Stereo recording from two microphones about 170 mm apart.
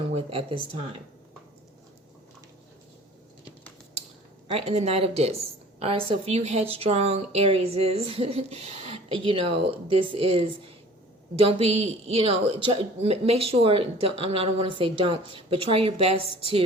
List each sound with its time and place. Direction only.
0.1 s a woman's voice: 35° right (ahead or behind)
4.5 s a woman's voice: 40° right (ahead or behind)